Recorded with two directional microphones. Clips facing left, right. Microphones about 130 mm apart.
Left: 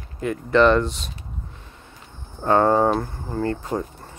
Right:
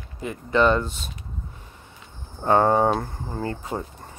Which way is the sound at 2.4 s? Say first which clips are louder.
Left 1 dB; 20° right (ahead or behind).